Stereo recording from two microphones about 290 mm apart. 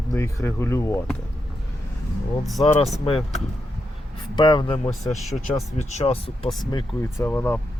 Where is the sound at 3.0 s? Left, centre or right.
Left.